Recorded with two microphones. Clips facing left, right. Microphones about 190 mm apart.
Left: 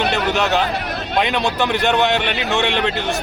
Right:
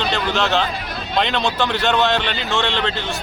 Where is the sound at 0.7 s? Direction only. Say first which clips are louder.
Left 4 dB; 65° left (ahead or behind).